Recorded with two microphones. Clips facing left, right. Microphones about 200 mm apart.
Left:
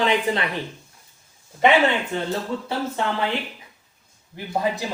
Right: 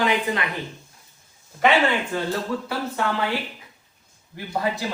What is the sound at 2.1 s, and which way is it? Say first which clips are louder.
Speech: even; 25° left (ahead or behind).